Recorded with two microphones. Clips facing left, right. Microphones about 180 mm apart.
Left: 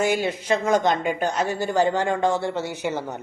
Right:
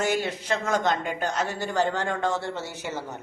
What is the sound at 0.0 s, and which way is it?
A woman's voice, 10° left (ahead or behind).